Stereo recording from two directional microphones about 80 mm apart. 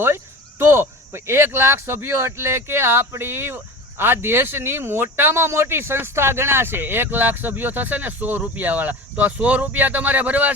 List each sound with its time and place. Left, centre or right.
0.6 s speech: right